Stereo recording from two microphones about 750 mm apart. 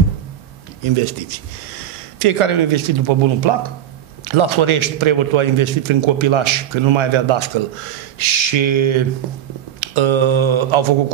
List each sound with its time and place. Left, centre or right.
0.8 s a man's voice: right